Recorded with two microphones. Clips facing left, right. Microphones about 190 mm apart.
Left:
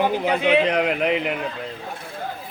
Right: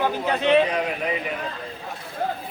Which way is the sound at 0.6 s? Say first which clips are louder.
Left 3 dB; 70° left (ahead or behind).